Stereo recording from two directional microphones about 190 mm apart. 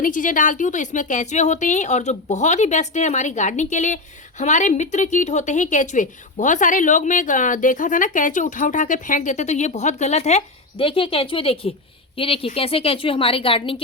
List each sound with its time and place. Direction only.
0.0 s a woman's voice: 45° left (ahead or behind); by 13.8 s 30° left (ahead or behind)